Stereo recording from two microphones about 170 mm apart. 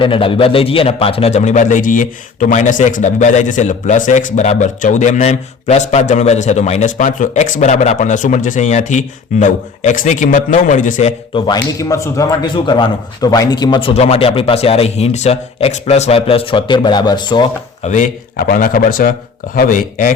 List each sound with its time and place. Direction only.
0.0 s a man's voice: 30° left (ahead or behind); by 11.1 s 50° left (ahead or behind)
11.3 s speech: 25° left (ahead or behind)
17.8 s a man's voice: 50° left (ahead or behind)